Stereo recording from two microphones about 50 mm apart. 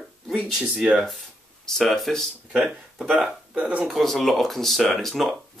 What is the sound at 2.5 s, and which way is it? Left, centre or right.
Speech, right.